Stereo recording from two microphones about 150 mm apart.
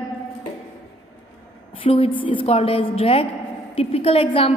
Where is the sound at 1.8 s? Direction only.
40° left (ahead or behind).